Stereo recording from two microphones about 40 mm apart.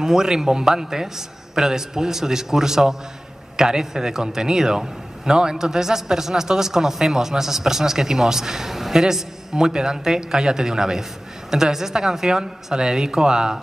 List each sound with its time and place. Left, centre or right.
0.0 s a man's voice: centre